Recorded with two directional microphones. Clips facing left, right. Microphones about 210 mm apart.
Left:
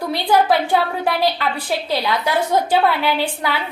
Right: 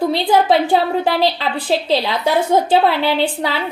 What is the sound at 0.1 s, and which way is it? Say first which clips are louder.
A woman's voice: right 2 dB; 25° right (ahead or behind).